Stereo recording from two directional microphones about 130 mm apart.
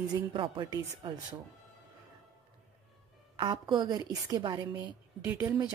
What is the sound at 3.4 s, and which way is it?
Speech, 40° right (ahead or behind).